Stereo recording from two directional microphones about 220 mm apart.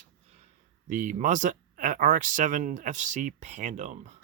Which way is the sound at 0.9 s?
35° right (ahead or behind).